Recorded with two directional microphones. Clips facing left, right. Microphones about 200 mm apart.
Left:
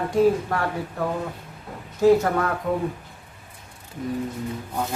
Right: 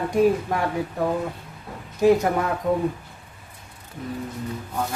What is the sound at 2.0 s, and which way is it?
Speech, 15° right (ahead or behind).